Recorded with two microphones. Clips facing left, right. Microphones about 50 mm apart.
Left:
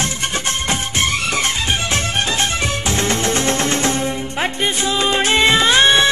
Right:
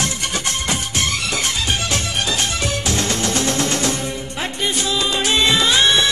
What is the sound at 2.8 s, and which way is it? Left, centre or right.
Music, left.